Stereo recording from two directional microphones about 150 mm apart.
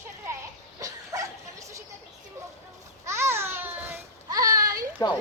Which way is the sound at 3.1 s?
15° right (ahead or behind).